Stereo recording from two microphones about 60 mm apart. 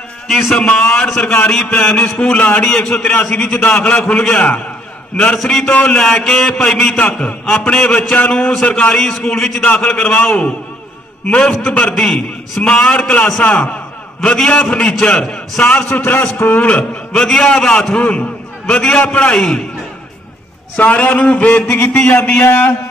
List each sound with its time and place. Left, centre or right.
0.3 s a man's voice: centre
1.2 s a man's voice: left
2.7 s a man's voice: centre
3.0 s a man's voice: left
8.9 s a man's voice: centre
16.4 s a man's voice: left
17.1 s a man's voice: centre
20.7 s a man's voice: left